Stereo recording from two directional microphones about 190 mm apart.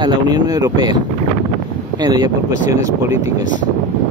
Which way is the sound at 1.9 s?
20° right (ahead or behind).